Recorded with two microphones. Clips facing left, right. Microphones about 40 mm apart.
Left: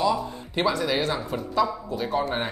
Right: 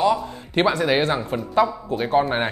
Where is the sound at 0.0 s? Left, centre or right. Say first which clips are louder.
Right 4 dB; right.